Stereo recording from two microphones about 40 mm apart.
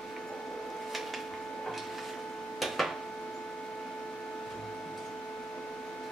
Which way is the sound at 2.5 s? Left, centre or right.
Centre.